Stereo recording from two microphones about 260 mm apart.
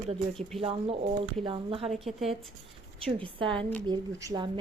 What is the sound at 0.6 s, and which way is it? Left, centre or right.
A woman's voice, right.